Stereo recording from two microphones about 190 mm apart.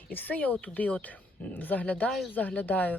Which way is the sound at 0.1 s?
10° left (ahead or behind).